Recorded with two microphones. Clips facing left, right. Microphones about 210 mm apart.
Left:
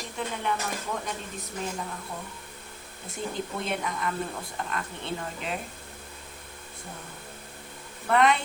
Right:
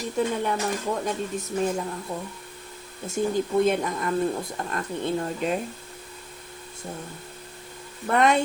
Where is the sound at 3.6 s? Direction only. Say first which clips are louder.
Right 7 dB; 45° right (ahead or behind).